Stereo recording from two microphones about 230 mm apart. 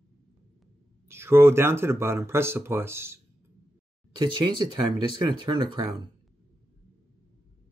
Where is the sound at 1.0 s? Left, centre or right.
Centre.